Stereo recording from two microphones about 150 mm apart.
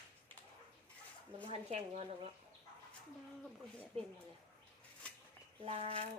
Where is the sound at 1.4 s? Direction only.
45° right (ahead or behind).